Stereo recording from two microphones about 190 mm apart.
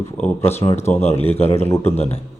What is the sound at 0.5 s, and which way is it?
Speech, 35° left (ahead or behind).